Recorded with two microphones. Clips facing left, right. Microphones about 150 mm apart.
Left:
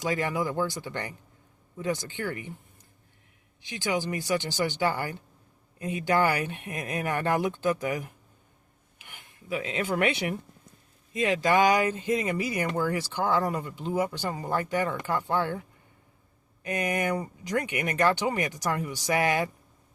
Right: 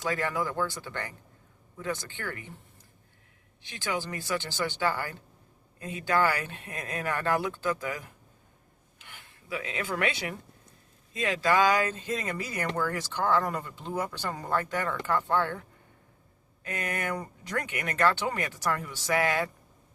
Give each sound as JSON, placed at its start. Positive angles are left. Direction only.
{"t": 0.0, "sound": "speech", "side_deg": 15}
{"t": 3.6, "sound": "speech", "side_deg": 15}
{"t": 16.6, "sound": "speech", "side_deg": 15}